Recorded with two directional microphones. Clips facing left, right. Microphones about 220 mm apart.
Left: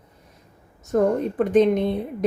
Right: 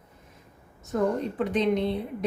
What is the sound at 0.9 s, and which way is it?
Speech, 50° left (ahead or behind).